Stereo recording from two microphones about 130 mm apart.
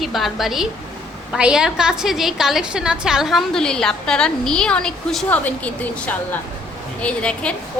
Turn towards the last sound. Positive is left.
turn(degrees=10)  # may be behind; listen again after turning